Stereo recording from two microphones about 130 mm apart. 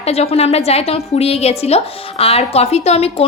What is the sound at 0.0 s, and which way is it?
A woman's voice, 50° left (ahead or behind).